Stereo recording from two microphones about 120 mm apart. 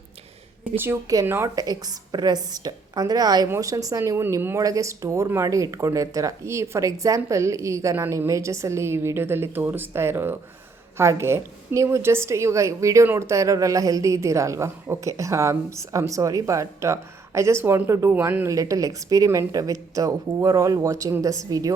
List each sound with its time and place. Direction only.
0.8 s a woman's voice: 20° right (ahead or behind)
1.6 s a woman's voice: 35° right (ahead or behind)